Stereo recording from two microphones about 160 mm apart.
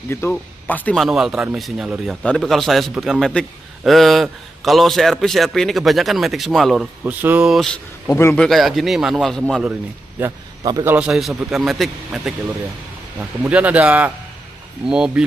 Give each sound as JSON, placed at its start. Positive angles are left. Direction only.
{"t": 0.1, "sound": "speech", "side_deg": 15}
{"t": 0.9, "sound": "a man's voice", "side_deg": 0}
{"t": 8.1, "sound": "speech", "side_deg": 20}
{"t": 8.4, "sound": "a man's voice", "side_deg": 0}
{"t": 10.2, "sound": "a man's voice", "side_deg": -20}